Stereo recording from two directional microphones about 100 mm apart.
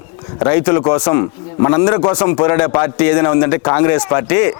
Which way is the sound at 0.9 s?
15° left (ahead or behind).